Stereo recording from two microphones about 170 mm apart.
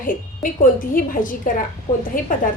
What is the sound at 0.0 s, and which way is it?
A woman's voice, 55° left (ahead or behind).